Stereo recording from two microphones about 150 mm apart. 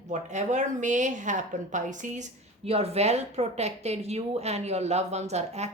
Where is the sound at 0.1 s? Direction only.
50° right (ahead or behind).